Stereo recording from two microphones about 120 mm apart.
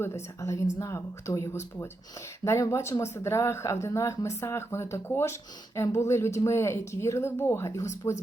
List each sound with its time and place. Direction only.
0.0 s speech: 25° left (ahead or behind)